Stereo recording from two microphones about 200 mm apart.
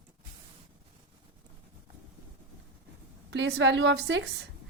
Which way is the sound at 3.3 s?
60° right (ahead or behind).